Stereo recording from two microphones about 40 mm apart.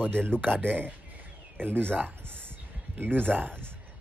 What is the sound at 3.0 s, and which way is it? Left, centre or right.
Speech, right.